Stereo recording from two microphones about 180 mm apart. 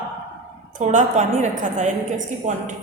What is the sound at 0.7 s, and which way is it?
A woman's voice, 45° right (ahead or behind).